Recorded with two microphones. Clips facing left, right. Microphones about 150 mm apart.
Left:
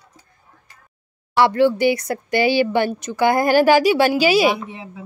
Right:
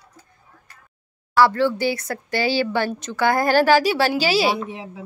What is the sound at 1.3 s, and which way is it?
Speech, 20° left (ahead or behind).